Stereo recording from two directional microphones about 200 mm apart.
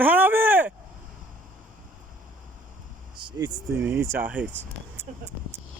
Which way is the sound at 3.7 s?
10° right (ahead or behind).